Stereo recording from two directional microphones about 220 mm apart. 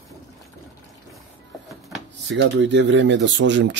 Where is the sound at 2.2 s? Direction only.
55° right (ahead or behind).